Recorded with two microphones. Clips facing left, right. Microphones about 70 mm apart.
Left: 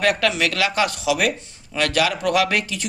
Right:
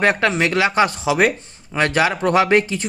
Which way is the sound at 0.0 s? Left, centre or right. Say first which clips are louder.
Right 3 dB; right.